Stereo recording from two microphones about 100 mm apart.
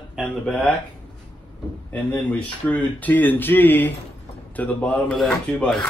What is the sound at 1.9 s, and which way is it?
A man's voice, 15° left (ahead or behind).